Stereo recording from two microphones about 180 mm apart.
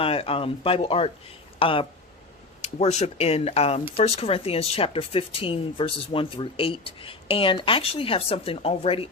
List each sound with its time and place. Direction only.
0.0 s speech: 30° left (ahead or behind)